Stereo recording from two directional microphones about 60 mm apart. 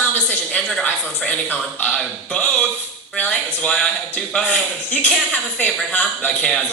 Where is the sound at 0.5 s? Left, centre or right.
Left.